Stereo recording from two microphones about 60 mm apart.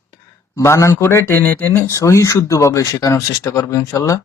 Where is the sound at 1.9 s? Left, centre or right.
Left.